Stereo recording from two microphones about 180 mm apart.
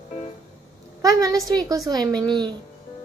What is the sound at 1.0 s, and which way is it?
A woman's voice, 20° right (ahead or behind).